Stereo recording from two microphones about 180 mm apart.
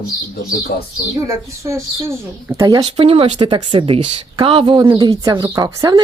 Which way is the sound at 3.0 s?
35° right (ahead or behind).